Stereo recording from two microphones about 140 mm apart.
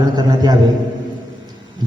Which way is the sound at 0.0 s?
30° right (ahead or behind).